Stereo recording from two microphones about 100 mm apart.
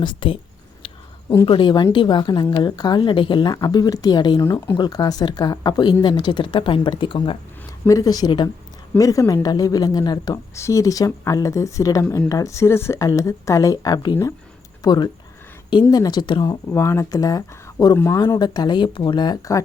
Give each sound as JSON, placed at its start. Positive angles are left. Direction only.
{"t": 0.0, "sound": "speech", "side_deg": 60}
{"t": 1.5, "sound": "a woman's voice", "side_deg": 55}
{"t": 3.5, "sound": "a woman's voice", "side_deg": 40}
{"t": 4.4, "sound": "a woman's voice", "side_deg": 30}
{"t": 7.9, "sound": "speech", "side_deg": 35}
{"t": 10.5, "sound": "a woman's voice", "side_deg": 30}
{"t": 16.6, "sound": "speech", "side_deg": 25}
{"t": 17.9, "sound": "speech", "side_deg": 25}
{"t": 18.3, "sound": "a woman's voice", "side_deg": 45}